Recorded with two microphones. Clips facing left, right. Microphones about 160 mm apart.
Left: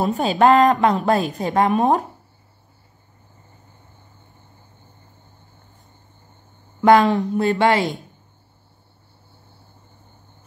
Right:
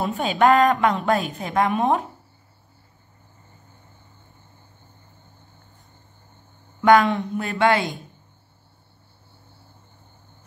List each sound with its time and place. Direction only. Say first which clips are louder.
0.0 s a woman's voice: left 3 dB; 40° left (ahead or behind)
6.8 s a woman's voice: left 2 dB; 30° left (ahead or behind)